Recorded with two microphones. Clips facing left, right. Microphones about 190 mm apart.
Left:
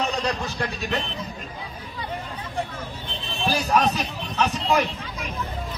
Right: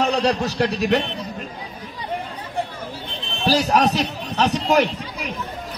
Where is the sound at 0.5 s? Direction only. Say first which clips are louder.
Right 9 dB; 80° right.